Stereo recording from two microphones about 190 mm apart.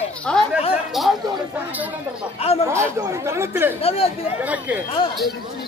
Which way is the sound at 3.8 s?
30° left (ahead or behind).